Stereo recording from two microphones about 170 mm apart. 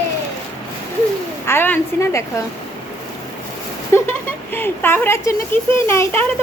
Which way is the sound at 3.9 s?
15° left (ahead or behind).